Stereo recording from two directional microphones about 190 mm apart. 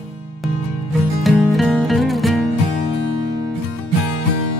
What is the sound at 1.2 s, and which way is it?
Music, centre (ahead or behind).